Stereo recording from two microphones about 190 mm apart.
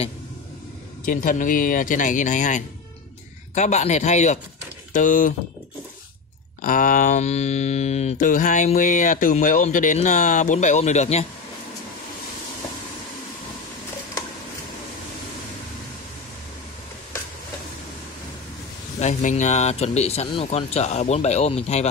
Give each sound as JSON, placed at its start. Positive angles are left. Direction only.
{"t": 1.0, "sound": "speech", "side_deg": 45}
{"t": 3.5, "sound": "mantra", "side_deg": 40}
{"t": 4.9, "sound": "speech", "side_deg": 45}
{"t": 6.6, "sound": "mantra", "side_deg": 45}
{"t": 18.9, "sound": "mantra", "side_deg": 40}